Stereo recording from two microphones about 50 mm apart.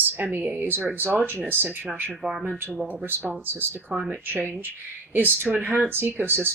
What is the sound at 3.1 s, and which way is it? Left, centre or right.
Speech, right.